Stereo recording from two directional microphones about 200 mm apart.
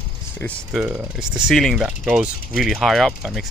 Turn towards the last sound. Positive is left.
turn(degrees=0)  # may be behind; listen again after turning